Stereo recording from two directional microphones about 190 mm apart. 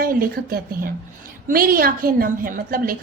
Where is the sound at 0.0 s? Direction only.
50° right (ahead or behind).